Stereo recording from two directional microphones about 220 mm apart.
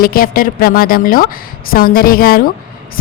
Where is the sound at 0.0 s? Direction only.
40° left (ahead or behind).